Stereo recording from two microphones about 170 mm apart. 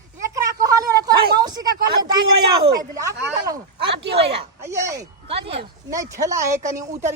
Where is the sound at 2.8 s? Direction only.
20° right (ahead or behind).